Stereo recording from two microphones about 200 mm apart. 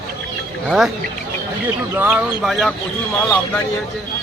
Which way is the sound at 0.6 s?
Centre (ahead or behind).